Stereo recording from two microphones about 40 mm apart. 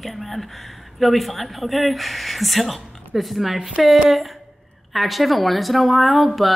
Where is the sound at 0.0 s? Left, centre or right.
Centre.